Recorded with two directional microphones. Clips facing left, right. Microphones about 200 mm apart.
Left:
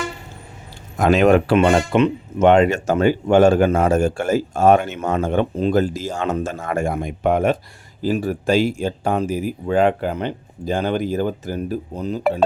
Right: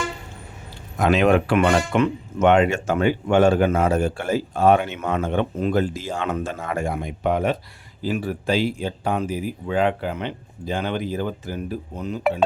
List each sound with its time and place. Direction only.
0.9 s speech: 45° left (ahead or behind)
1.5 s speech: 30° left (ahead or behind)